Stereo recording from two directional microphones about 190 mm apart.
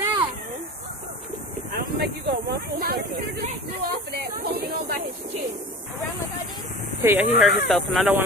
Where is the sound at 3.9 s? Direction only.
60° right (ahead or behind).